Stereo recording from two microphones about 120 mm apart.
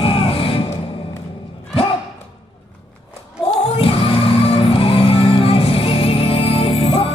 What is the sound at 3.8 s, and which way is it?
Music, 50° left (ahead or behind).